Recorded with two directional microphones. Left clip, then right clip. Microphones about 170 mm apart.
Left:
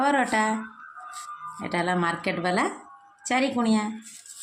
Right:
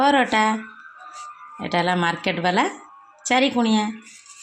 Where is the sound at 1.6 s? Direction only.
30° right (ahead or behind).